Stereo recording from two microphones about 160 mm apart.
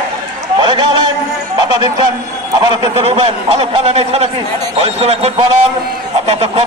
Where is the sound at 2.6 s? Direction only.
25° right (ahead or behind).